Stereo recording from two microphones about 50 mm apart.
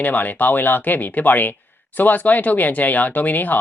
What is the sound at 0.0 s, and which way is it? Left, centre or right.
Speech, left.